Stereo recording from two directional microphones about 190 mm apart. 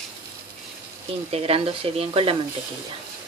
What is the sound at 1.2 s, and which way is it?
Speech, 30° right (ahead or behind).